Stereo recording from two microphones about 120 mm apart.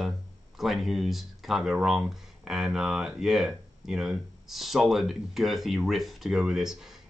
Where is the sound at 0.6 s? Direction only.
Centre (ahead or behind).